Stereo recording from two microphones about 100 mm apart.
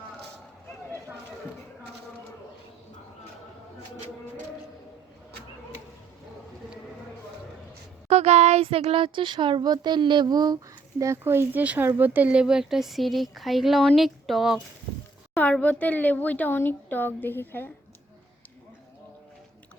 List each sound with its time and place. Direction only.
8.0 s speech: 90° right; by 10.6 s 40° right (ahead or behind)
11.0 s speech: 25° right (ahead or behind); by 14.6 s 5° right (ahead or behind)
15.4 s speech: 15° left (ahead or behind)